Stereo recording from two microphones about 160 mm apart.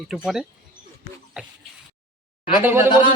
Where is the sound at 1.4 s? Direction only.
5° right (ahead or behind).